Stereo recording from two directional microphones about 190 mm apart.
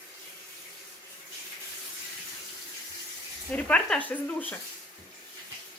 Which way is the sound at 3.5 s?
5° left (ahead or behind).